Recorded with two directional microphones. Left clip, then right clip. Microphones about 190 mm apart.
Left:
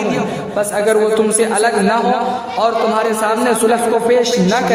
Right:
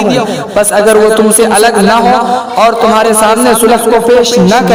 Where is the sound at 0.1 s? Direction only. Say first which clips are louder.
Right 8 dB; 45° right (ahead or behind).